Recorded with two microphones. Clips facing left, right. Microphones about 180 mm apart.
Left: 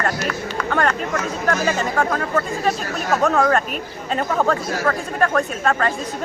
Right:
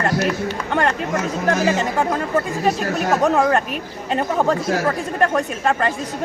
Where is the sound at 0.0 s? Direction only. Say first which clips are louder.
Right 4 dB; 20° right (ahead or behind).